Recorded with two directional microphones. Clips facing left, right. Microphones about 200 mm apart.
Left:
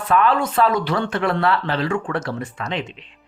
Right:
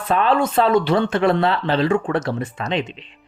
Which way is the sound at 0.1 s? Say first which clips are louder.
Right 1 dB; 25° right (ahead or behind).